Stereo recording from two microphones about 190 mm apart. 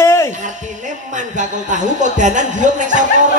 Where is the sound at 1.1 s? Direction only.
40° right (ahead or behind).